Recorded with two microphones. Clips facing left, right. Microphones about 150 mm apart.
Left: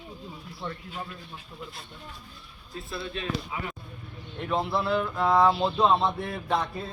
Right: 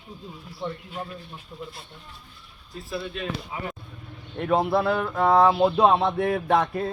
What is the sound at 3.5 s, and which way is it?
Speech, 35° right (ahead or behind).